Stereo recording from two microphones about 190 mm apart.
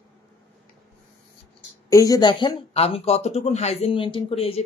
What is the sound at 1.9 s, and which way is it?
Speech, 20° left (ahead or behind).